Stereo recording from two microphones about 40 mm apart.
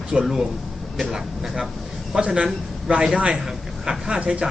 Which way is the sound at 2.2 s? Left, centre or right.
Right.